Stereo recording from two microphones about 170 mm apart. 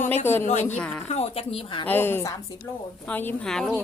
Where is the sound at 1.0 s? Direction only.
40° left (ahead or behind).